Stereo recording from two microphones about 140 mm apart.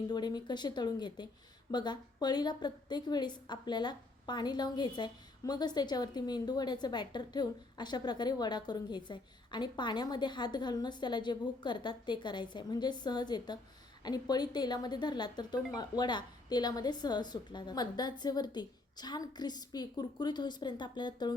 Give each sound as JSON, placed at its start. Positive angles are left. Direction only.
{"t": 0.1, "sound": "a woman's voice", "side_deg": 30}